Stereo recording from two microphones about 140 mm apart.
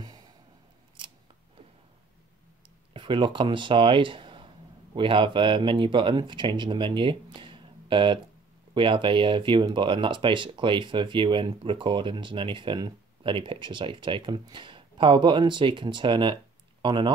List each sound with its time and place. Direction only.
0.0 s a sound: 30° right (ahead or behind)
1.0 s scissors: 35° right (ahead or behind)
2.9 s speech: 35° right (ahead or behind)